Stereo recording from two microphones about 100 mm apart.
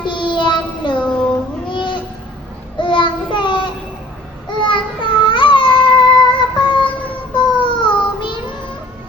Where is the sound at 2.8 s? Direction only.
55° left (ahead or behind).